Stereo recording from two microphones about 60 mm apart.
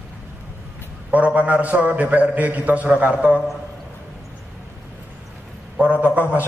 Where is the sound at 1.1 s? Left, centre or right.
Right.